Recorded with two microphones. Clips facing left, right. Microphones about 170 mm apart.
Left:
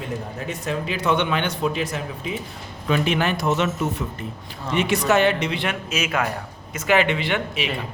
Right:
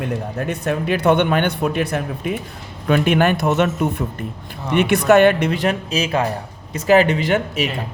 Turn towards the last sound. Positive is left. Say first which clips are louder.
# right 6 dB
turn(degrees=-40)  # may be behind; listen again after turning